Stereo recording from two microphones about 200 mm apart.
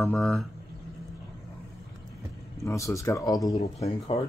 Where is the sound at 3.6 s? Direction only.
30° left (ahead or behind).